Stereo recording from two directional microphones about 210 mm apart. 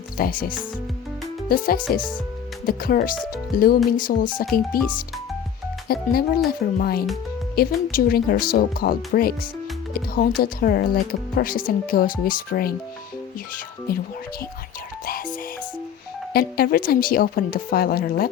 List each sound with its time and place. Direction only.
0.2 s speech: 40° left (ahead or behind)
5.9 s speech: 45° left (ahead or behind)
16.3 s speech: 45° left (ahead or behind)